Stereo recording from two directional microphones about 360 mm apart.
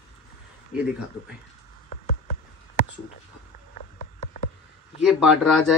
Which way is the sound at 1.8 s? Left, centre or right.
Left.